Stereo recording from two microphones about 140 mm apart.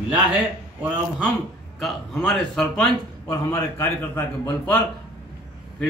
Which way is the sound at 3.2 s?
15° left (ahead or behind).